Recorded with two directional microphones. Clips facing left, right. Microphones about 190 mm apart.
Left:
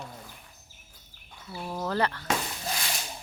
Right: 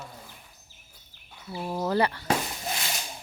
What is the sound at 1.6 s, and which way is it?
Speech, 15° right (ahead or behind).